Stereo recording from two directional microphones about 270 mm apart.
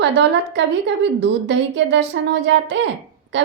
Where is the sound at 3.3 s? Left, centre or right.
Right.